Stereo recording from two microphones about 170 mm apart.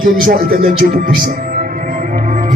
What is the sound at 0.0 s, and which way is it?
Music, 55° right (ahead or behind).